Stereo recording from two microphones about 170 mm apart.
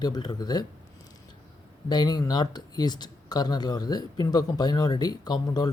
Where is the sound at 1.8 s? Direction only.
25° left (ahead or behind).